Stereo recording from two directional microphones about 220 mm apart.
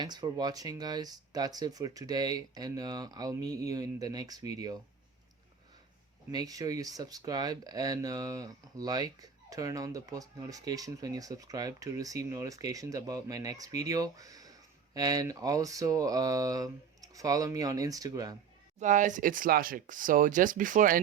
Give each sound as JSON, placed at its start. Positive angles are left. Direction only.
{"t": 0.0, "sound": "speech", "side_deg": -20}
{"t": 6.3, "sound": "speech", "side_deg": -15}
{"t": 18.8, "sound": "speech", "side_deg": -35}